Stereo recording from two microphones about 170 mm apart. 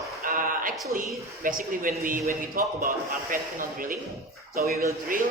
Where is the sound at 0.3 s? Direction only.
55° right (ahead or behind).